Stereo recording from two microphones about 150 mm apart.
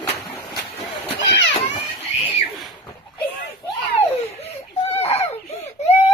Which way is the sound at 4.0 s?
45° left (ahead or behind).